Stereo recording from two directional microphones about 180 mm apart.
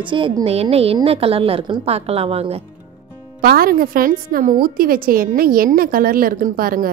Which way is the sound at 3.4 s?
55° right (ahead or behind).